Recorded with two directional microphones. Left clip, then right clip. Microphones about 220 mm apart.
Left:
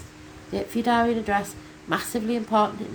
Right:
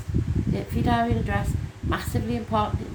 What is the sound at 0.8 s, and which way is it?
A woman's voice, 25° left (ahead or behind).